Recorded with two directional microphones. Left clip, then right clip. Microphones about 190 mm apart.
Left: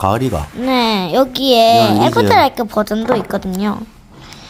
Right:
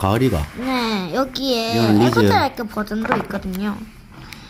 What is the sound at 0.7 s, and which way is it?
A woman's voice, 50° left (ahead or behind).